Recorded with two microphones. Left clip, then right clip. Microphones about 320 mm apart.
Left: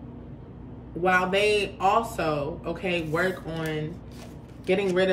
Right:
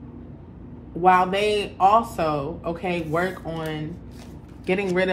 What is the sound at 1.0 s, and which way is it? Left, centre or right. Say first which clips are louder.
Speech: right 6 dB; centre.